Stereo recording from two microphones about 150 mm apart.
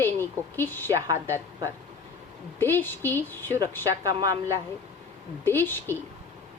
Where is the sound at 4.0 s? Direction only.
25° right (ahead or behind).